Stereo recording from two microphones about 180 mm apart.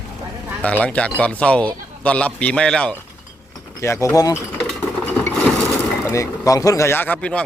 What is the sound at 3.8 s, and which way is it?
Speech, 15° left (ahead or behind).